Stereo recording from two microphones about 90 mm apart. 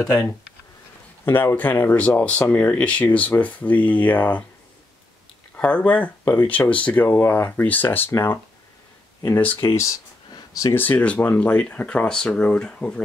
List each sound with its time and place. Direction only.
1.2 s speech: 25° left (ahead or behind)
5.6 s speech: 15° left (ahead or behind)
10.3 s a sound: 40° left (ahead or behind)
10.7 s speech: 20° left (ahead or behind)